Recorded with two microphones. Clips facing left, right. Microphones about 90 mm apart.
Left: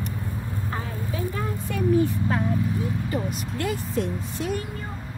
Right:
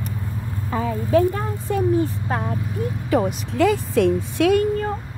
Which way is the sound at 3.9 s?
75° right (ahead or behind).